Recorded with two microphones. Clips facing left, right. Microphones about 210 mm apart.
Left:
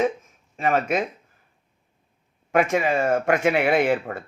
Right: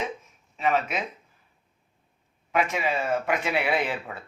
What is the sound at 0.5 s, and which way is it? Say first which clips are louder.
Speech: left 4 dB; 45° left (ahead or behind).